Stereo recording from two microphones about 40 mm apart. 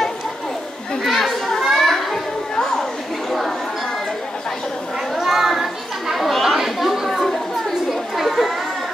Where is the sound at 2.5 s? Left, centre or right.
Centre.